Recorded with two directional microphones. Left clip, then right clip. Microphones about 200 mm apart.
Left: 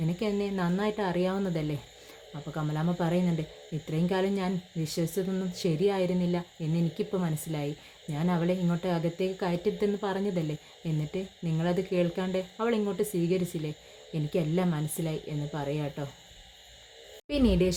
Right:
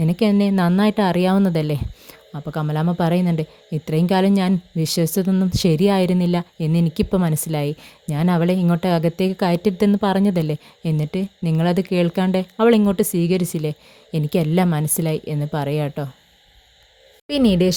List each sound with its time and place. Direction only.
0.0 s a woman's voice: 55° right (ahead or behind)
17.2 s a woman's voice: 45° right (ahead or behind)